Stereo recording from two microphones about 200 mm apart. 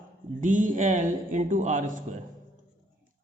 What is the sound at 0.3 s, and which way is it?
A man's voice, 40° right (ahead or behind).